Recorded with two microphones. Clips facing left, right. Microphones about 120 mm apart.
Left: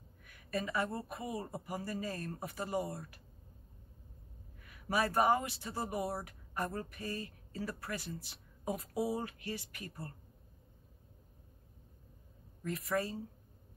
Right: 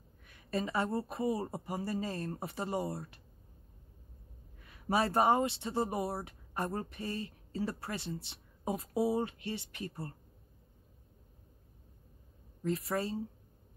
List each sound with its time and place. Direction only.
0.2 s speech: 30° right (ahead or behind)
4.6 s speech: 30° right (ahead or behind)
12.6 s speech: 30° right (ahead or behind)